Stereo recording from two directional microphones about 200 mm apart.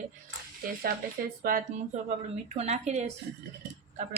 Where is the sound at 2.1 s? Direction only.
35° right (ahead or behind).